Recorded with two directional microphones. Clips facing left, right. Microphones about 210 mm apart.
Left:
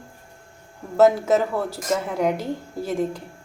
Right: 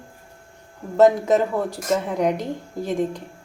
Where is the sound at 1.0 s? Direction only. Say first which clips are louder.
Right 1 dB; centre (ahead or behind).